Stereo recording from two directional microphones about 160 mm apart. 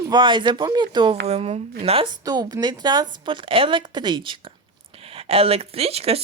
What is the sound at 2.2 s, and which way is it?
Speech, 25° right (ahead or behind).